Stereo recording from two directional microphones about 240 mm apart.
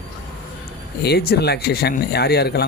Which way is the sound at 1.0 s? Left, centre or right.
Left.